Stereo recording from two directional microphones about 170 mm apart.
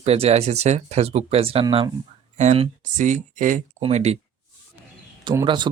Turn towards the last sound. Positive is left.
turn(degrees=-25)  # may be behind; listen again after turning